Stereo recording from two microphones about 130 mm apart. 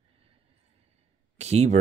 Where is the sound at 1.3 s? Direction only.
55° right (ahead or behind).